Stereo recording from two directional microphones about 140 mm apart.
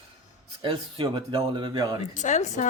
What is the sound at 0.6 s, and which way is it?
Speech, 40° right (ahead or behind).